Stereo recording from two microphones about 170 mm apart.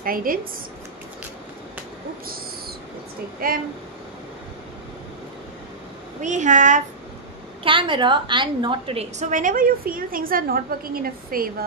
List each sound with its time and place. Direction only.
0.0 s a woman's voice: 55° right (ahead or behind)
3.4 s a woman's voice: 60° right (ahead or behind)
6.2 s a woman's voice: 45° right (ahead or behind)
7.6 s a woman's voice: 30° right (ahead or behind); by 11.5 s 60° right (ahead or behind)